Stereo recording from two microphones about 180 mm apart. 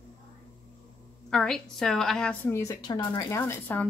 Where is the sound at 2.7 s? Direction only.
20° left (ahead or behind).